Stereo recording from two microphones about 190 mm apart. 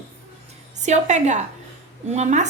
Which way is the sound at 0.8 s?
40° right (ahead or behind).